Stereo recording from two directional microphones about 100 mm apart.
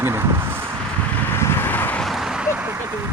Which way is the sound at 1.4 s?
25° left (ahead or behind).